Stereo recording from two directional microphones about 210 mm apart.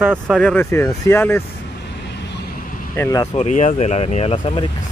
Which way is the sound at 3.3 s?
35° left (ahead or behind).